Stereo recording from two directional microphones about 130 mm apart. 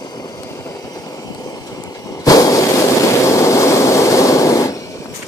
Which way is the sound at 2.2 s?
25° left (ahead or behind).